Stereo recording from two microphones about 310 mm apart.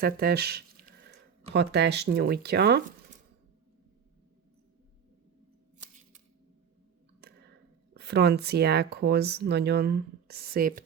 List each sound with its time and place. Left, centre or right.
0.0 s speech: right
7.2 s a sound: right
7.9 s speech: right